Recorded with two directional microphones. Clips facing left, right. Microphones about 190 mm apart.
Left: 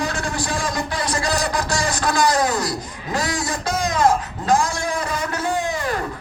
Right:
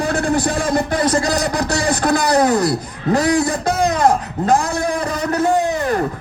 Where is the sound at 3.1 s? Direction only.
35° right (ahead or behind).